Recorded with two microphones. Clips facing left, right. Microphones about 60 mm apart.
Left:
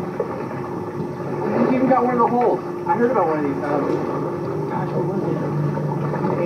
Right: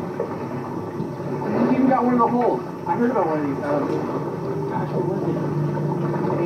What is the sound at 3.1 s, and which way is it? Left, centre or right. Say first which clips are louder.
Speech: left 2 dB; left.